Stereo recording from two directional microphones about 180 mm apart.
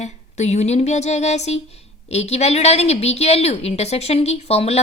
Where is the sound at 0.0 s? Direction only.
40° left (ahead or behind).